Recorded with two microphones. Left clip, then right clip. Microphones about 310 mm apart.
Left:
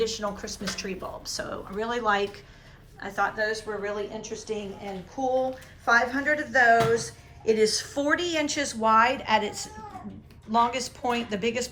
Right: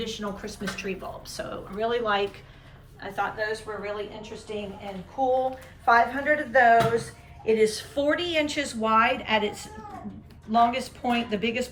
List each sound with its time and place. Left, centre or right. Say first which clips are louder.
0.0 s speech: left 4 dB; centre
5.2 s a sound: right 4 dB; left
5.9 s speech: right 2 dB; centre